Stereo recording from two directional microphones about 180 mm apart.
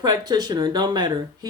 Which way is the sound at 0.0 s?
20° right (ahead or behind).